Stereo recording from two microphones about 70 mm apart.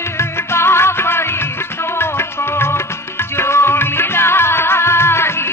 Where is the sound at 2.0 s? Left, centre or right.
Left.